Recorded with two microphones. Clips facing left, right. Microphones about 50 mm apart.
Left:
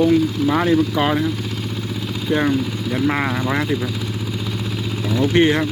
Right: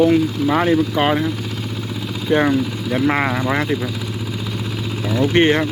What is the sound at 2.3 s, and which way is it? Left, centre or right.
Speech, right.